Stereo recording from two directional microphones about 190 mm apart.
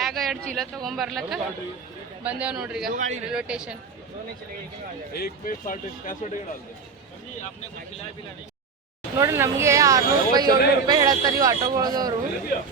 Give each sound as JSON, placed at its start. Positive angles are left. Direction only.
{"t": 0.0, "sound": "speech", "side_deg": 0}
{"t": 2.8, "sound": "speech", "side_deg": -40}
{"t": 3.3, "sound": "speech", "side_deg": -5}
{"t": 5.1, "sound": "a man's voice", "side_deg": 50}
{"t": 9.1, "sound": "speech", "side_deg": -15}